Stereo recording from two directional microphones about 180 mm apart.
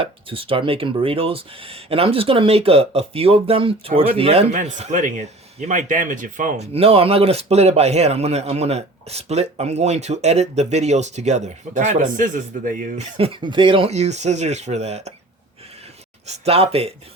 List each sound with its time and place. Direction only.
0.0 s speech: 30° right (ahead or behind); by 13.1 s 50° right (ahead or behind)
13.1 s speech: 30° right (ahead or behind)
16.2 s speech: 35° right (ahead or behind)